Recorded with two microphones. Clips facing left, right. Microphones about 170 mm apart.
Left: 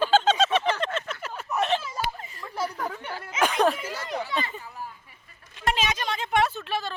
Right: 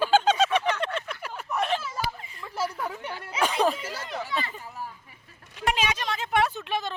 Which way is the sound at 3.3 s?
35° right (ahead or behind).